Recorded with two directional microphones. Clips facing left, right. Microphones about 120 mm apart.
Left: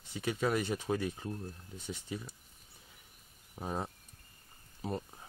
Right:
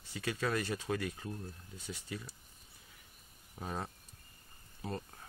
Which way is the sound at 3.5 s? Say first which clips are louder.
Left 3 dB; 20° left (ahead or behind).